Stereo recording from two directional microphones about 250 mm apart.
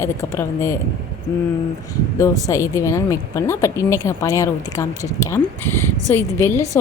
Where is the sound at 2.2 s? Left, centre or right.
Centre.